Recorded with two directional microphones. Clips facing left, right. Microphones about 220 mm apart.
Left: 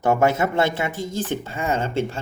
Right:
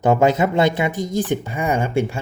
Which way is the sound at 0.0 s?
20° right (ahead or behind).